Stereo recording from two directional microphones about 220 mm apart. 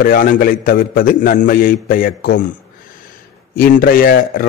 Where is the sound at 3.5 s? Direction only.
40° left (ahead or behind).